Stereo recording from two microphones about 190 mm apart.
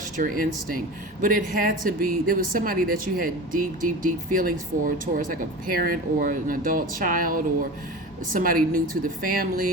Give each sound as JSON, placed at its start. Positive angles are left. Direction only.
{"t": 0.0, "sound": "speech", "side_deg": -45}